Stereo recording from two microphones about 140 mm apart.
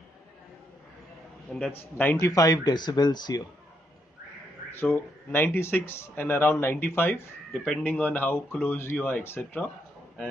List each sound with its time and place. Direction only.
1.5 s speech: 10° left (ahead or behind); by 3.4 s 30° left (ahead or behind)
4.7 s speech: 15° left (ahead or behind)
7.5 s speech: 5° left (ahead or behind)